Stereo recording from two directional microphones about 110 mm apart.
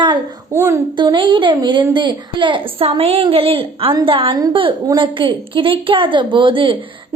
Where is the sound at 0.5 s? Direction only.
25° right (ahead or behind).